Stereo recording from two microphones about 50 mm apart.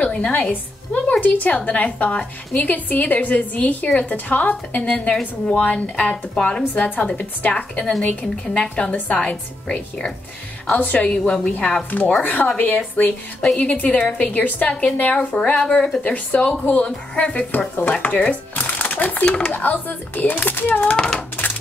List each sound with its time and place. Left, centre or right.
0.0 s a woman's voice: left
6.3 s a woman's voice: centre
6.7 s a woman's voice: left
7.5 s a woman's voice: left
11.1 s a woman's voice: centre
11.4 s a woman's voice: left
15.1 s a woman's voice: centre; by 19.2 s left
19.2 s a woman's voice: centre
19.5 s a woman's voice: left
20.9 s a woman's voice: centre